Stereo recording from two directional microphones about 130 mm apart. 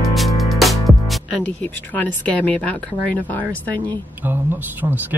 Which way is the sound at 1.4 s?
10° left (ahead or behind).